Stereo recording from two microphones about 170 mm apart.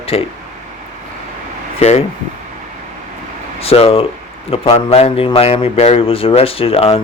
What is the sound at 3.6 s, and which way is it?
Speech, 35° left (ahead or behind).